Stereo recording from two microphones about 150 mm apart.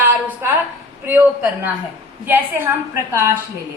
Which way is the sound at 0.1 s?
10° right (ahead or behind).